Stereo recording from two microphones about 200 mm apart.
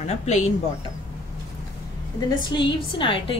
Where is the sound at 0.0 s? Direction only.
35° left (ahead or behind).